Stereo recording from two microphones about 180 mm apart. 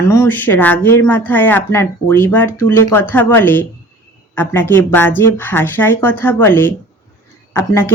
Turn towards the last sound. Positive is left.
turn(degrees=15)  # may be behind; listen again after turning